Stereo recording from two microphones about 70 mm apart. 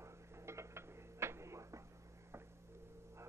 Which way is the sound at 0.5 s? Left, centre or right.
Right.